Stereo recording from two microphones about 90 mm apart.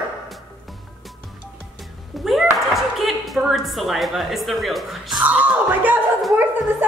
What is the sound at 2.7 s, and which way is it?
A woman's voice, centre (ahead or behind).